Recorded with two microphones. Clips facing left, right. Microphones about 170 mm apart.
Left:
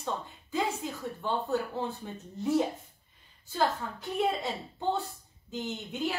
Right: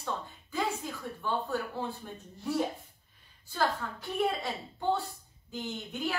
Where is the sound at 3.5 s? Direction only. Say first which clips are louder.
Left 2 dB; 20° left (ahead or behind).